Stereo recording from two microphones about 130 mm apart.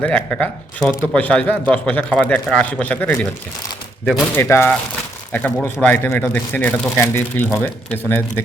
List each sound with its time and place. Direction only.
0.0 s a man's voice: 10° left (ahead or behind)
4.0 s speech: centre (ahead or behind)
4.4 s a man's voice: 20° left (ahead or behind)